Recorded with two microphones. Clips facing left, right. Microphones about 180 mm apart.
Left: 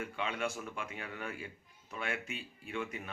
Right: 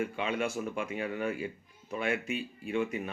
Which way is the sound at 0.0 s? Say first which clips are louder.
Right 5 dB; 15° right (ahead or behind).